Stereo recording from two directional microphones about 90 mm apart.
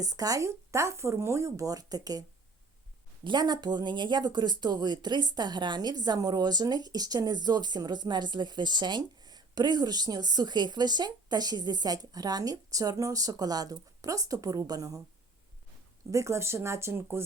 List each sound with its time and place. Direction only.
0.0 s speech: 45° right (ahead or behind)
3.2 s speech: 50° right (ahead or behind)
16.1 s speech: 30° right (ahead or behind)